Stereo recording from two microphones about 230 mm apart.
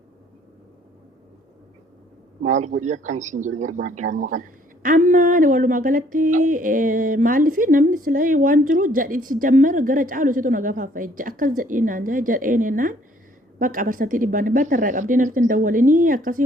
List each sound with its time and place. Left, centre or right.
2.4 s a man's voice: right